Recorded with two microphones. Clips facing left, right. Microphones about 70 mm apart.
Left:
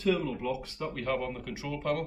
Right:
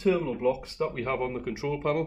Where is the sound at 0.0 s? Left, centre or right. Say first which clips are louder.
Right 4 dB; right.